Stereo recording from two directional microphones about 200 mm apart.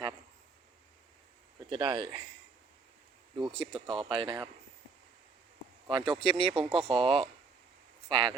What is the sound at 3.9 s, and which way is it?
Speech, 25° right (ahead or behind).